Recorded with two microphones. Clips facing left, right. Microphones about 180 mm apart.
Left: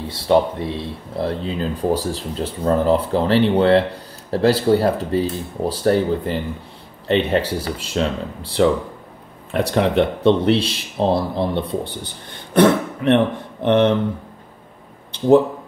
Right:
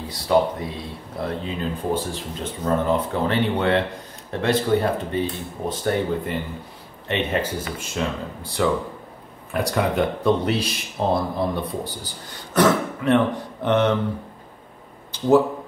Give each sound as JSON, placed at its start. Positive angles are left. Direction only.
{"t": 0.1, "sound": "speech", "side_deg": 30}